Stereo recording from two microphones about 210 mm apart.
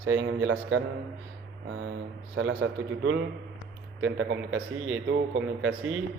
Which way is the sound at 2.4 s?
65° right (ahead or behind).